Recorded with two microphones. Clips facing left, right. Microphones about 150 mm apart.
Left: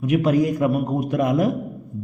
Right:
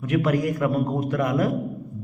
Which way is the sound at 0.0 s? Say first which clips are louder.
Left 4 dB; 15° left (ahead or behind).